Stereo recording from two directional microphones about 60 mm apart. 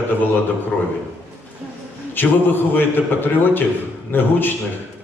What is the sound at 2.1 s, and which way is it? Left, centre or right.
A man's voice, left.